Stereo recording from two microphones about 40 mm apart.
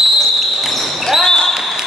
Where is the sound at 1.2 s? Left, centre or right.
Centre.